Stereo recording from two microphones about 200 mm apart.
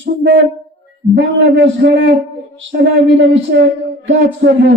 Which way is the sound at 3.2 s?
65° right (ahead or behind).